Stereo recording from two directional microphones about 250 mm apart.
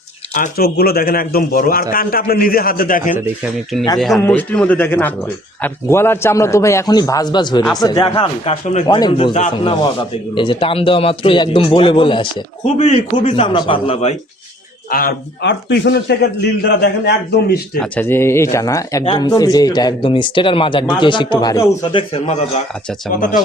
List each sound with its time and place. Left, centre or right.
0.3 s a man's voice: left
3.9 s a man's voice: centre; by 14.2 s left
14.8 s a man's voice: left
17.7 s speech: centre; by 22.6 s left